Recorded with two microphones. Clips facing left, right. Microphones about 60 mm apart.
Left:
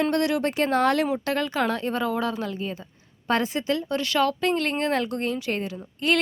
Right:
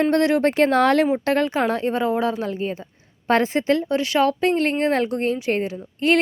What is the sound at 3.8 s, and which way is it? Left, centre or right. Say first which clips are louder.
Speech: right 4 dB; right.